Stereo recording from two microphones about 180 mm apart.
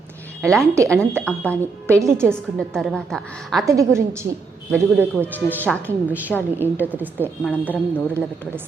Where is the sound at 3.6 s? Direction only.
15° right (ahead or behind).